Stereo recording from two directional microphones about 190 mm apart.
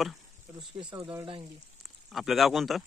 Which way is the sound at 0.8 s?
25° right (ahead or behind).